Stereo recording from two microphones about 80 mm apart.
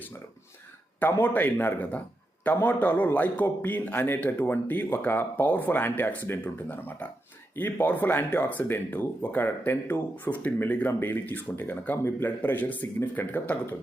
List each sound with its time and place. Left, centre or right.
1.2 s speech: left